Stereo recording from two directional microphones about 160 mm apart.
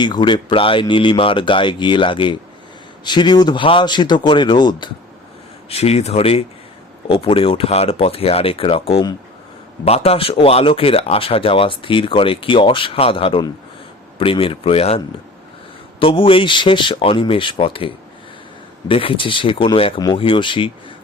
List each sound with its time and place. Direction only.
0.0 s a man's voice: 30° left (ahead or behind)
5.6 s speech: 40° left (ahead or behind)
9.8 s speech: 40° left (ahead or behind)